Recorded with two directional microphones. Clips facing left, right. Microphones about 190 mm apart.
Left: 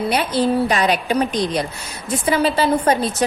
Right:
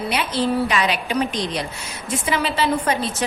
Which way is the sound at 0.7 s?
40° left (ahead or behind).